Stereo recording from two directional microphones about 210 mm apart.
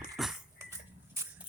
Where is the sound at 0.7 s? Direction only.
15° right (ahead or behind).